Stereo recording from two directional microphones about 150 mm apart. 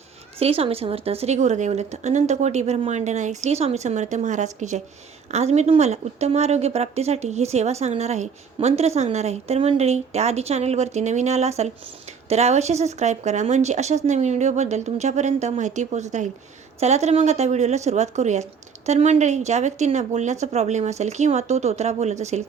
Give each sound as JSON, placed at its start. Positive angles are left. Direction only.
{"t": 0.3, "sound": "a woman's voice", "side_deg": -40}